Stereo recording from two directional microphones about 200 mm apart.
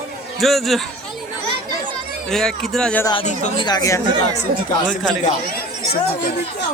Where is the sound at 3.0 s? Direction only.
25° left (ahead or behind).